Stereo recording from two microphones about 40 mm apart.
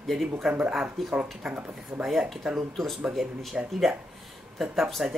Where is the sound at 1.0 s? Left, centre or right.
Centre.